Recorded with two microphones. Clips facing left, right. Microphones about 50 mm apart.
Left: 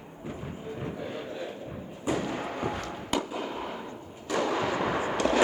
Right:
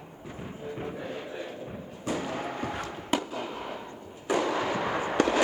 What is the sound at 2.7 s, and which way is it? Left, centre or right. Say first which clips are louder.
Chop: right 1 dB; centre.